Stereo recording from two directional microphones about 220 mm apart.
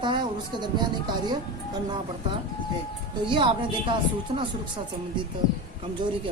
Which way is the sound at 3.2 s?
20° right (ahead or behind).